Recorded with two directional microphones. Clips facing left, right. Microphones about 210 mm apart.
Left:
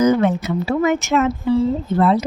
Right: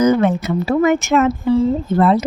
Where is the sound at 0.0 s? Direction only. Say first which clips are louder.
Right 1 dB; 50° right (ahead or behind).